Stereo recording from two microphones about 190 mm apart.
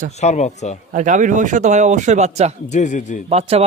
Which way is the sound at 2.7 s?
40° left (ahead or behind).